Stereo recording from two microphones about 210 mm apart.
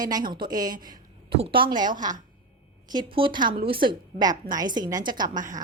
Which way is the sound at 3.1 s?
25° right (ahead or behind).